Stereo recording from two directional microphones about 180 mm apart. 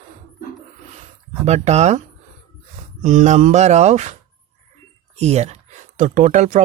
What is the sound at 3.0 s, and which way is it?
Speech, 40° right (ahead or behind).